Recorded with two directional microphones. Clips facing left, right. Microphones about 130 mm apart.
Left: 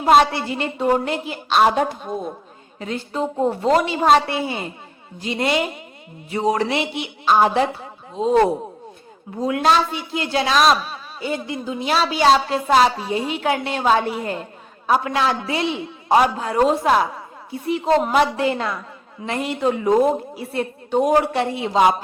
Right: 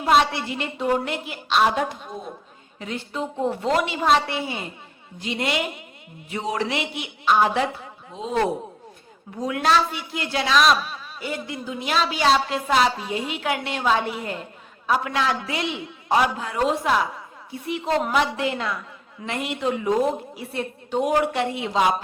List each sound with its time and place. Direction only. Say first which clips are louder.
0.0 s a man's voice: left 4 dB; 40° left (ahead or behind)
18.1 s a man's voice: left 5 dB; 40° left (ahead or behind)